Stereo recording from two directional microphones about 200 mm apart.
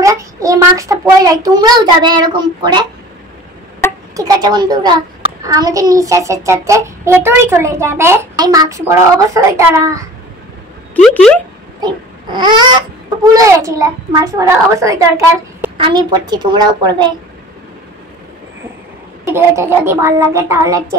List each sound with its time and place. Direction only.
0.0 s a child's voice: 15° right (ahead or behind)
4.2 s a child's voice: 20° right (ahead or behind)
11.0 s speech: 5° left (ahead or behind)
11.8 s baby cry: 20° right (ahead or behind)
13.2 s a child's voice: 15° right (ahead or behind)
19.2 s a child's voice: 15° right (ahead or behind)